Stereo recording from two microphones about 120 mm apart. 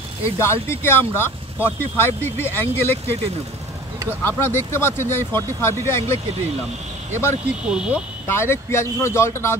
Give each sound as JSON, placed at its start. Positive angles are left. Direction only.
{"t": 0.2, "sound": "speech", "side_deg": 20}
{"t": 4.2, "sound": "speech", "side_deg": 20}
{"t": 7.6, "sound": "speech", "side_deg": -10}
{"t": 8.3, "sound": "speech", "side_deg": 20}